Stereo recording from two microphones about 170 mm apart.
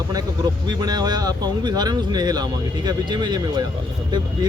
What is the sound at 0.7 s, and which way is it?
Speech, 25° right (ahead or behind).